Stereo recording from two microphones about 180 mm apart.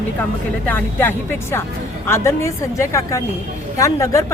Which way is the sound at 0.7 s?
10° left (ahead or behind).